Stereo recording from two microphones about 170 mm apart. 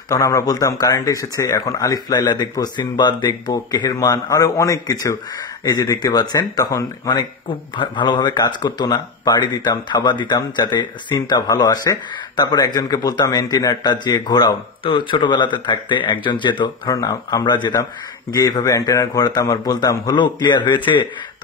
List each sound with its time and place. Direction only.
0.1 s speech: 20° left (ahead or behind)